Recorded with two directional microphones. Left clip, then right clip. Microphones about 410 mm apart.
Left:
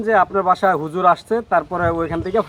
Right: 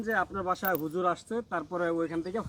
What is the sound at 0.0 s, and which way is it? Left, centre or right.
Speech, centre.